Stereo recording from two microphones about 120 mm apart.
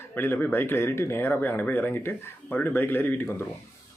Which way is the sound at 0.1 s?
15° left (ahead or behind).